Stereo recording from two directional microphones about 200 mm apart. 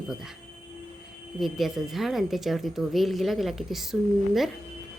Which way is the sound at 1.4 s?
Centre (ahead or behind).